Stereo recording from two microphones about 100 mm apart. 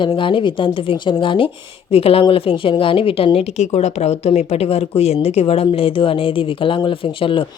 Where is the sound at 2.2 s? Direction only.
65° left (ahead or behind).